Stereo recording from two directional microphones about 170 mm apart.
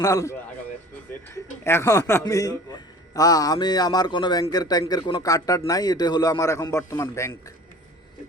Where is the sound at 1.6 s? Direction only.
15° left (ahead or behind).